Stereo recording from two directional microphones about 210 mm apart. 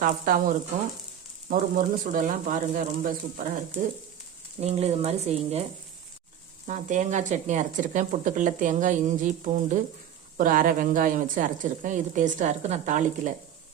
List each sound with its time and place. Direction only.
0.0 s a woman's voice: 40° right (ahead or behind)
4.6 s speech: 30° right (ahead or behind)
6.7 s a woman's voice: 35° right (ahead or behind)